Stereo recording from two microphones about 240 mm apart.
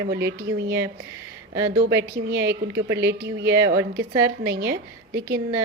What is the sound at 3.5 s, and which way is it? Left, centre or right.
A woman's voice, centre.